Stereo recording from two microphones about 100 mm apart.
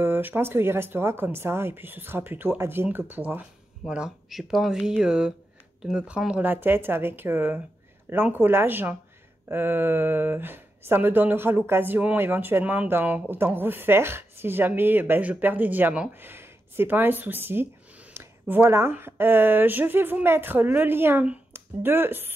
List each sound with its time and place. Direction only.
0.0 s speech: 20° right (ahead or behind)
3.9 s speech: 5° right (ahead or behind); by 22.3 s 20° right (ahead or behind)